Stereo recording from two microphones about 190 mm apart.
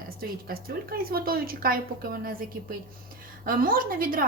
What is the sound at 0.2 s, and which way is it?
A woman's voice, 50° right (ahead or behind).